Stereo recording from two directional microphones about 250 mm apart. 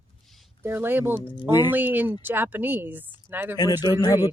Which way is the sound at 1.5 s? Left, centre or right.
Centre.